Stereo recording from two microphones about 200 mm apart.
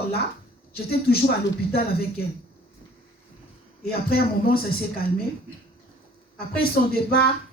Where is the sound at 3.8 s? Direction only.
50° left (ahead or behind).